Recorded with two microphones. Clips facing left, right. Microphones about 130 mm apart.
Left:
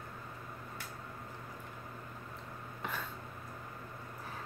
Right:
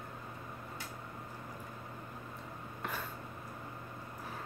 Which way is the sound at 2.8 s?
5° right (ahead or behind).